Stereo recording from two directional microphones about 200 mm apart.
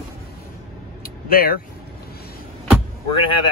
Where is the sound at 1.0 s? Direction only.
50° left (ahead or behind).